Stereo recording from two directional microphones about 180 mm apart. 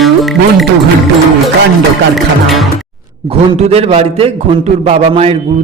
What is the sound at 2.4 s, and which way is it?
Music, centre (ahead or behind).